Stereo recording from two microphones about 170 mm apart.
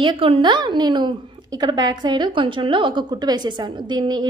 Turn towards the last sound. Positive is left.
turn(degrees=-25)  # may be behind; listen again after turning